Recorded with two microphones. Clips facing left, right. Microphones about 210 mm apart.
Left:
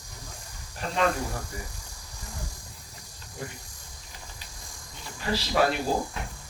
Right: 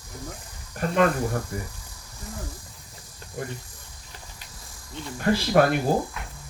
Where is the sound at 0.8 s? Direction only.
55° right (ahead or behind).